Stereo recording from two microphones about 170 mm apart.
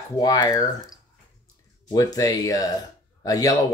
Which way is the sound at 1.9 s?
20° left (ahead or behind).